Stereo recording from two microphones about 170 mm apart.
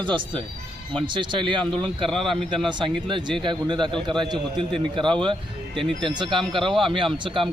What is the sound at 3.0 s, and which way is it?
A man's voice, 30° right (ahead or behind).